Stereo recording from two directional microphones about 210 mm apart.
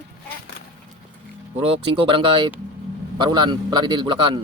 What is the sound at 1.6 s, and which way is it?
A man's voice, 25° right (ahead or behind).